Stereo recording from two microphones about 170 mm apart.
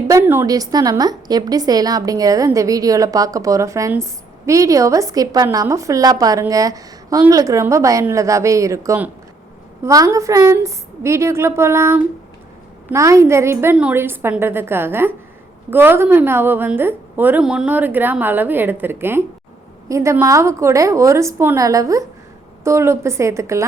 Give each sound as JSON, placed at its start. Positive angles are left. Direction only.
{"t": 0.1, "sound": "a woman's voice", "side_deg": -15}